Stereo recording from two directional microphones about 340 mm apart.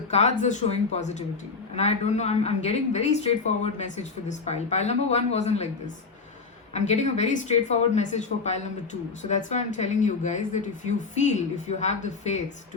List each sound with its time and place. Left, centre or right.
0.1 s speech: centre